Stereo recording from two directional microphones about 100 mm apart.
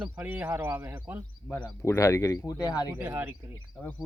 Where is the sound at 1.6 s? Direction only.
30° left (ahead or behind).